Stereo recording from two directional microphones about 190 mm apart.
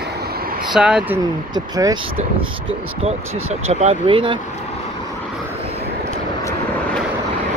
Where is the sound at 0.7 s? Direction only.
5° right (ahead or behind).